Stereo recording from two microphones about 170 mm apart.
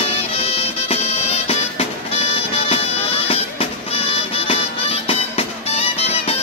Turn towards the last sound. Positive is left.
turn(degrees=35)  # may be behind; listen again after turning